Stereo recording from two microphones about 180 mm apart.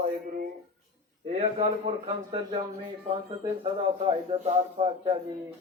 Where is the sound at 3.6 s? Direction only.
30° right (ahead or behind).